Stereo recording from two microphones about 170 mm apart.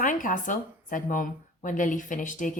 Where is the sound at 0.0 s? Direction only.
50° left (ahead or behind).